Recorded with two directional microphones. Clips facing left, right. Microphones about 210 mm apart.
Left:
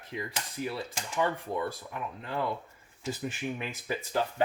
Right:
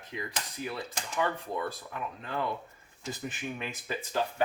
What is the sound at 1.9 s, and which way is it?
Speech, 15° left (ahead or behind).